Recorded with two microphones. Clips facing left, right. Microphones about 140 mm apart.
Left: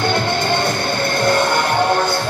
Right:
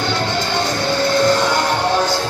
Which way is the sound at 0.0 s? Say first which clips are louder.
Left 2 dB; 55° left (ahead or behind).